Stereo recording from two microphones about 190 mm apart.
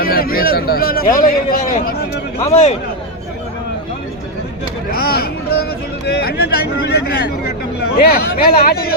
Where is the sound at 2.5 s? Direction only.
35° left (ahead or behind).